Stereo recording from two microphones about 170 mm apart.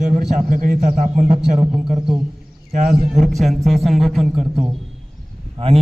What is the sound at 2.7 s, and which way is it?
Speech, 60° right (ahead or behind).